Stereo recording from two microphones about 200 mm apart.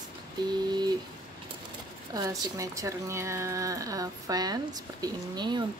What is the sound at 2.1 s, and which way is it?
Speech, 15° right (ahead or behind).